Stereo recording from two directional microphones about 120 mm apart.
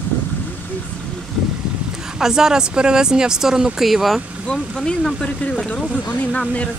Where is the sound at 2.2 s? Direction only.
5° right (ahead or behind).